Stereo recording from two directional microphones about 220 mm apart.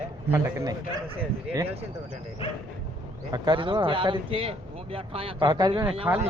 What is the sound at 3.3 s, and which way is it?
Speech, 20° right (ahead or behind).